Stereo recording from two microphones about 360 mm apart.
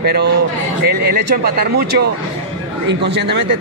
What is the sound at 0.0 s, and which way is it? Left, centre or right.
A man's voice, right.